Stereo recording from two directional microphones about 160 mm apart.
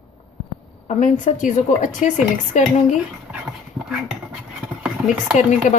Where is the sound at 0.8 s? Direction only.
50° left (ahead or behind).